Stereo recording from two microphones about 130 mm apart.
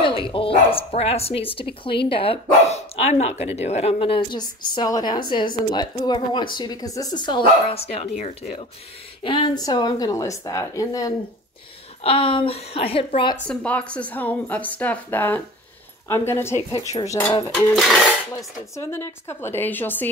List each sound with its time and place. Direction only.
0.0 s a woman's voice: 40° left (ahead or behind)
7.7 s speech: 50° left (ahead or behind)
9.2 s a woman's voice: 40° left (ahead or behind)
9.6 s a woman's voice: 30° left (ahead or behind)
12.0 s speech: 45° left (ahead or behind)
13.5 s a woman's voice: 10° left (ahead or behind)
17.6 s speech: centre (ahead or behind)
18.8 s a woman's voice: 20° left (ahead or behind)